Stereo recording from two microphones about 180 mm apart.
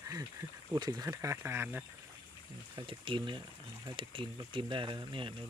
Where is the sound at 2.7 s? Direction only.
30° right (ahead or behind).